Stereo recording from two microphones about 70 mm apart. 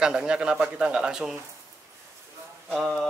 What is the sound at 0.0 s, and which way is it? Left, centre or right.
Speech, centre.